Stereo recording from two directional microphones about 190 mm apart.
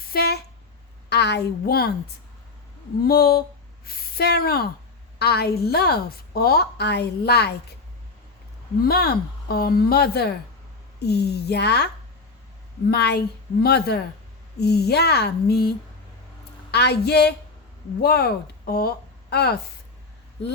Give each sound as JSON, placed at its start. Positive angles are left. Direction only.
{"t": 0.0, "sound": "a sound", "side_deg": 55}
{"t": 1.1, "sound": "a woman's voice", "side_deg": 60}
{"t": 3.0, "sound": "a woman's voice", "side_deg": 50}
{"t": 8.8, "sound": "a woman's voice", "side_deg": 55}
{"t": 12.9, "sound": "a woman's voice", "side_deg": 60}
{"t": 16.7, "sound": "a woman's voice", "side_deg": 60}